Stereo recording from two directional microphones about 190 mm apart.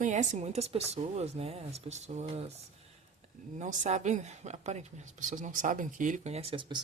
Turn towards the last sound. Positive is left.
turn(degrees=-25)  # may be behind; listen again after turning